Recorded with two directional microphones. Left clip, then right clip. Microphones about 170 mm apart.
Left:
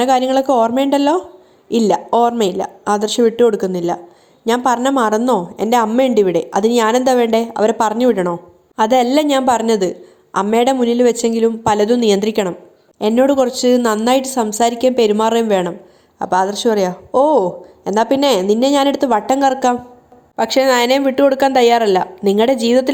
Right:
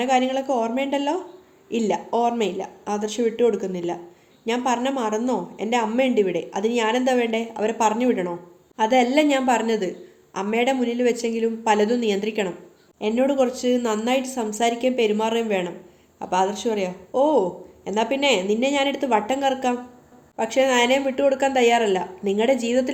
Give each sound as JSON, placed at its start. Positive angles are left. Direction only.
{"t": 0.0, "sound": "a woman's voice", "side_deg": 55}